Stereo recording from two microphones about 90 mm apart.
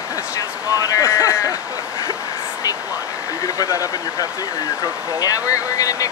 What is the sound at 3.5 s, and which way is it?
Speech, 40° left (ahead or behind).